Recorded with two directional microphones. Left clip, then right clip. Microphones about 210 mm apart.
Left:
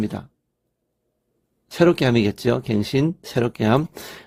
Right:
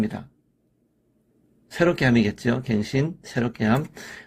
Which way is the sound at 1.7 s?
35° left (ahead or behind).